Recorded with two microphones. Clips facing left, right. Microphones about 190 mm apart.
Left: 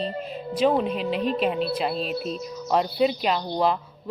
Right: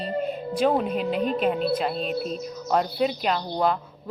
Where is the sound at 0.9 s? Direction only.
45° right (ahead or behind).